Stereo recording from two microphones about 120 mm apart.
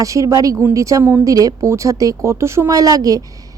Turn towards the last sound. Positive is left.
turn(degrees=-30)  # may be behind; listen again after turning